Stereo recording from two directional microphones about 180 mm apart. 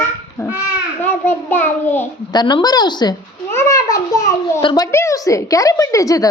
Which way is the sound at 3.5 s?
15° left (ahead or behind).